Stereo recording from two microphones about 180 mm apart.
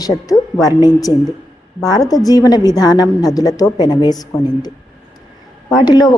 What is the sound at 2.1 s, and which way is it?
Speech, 20° left (ahead or behind).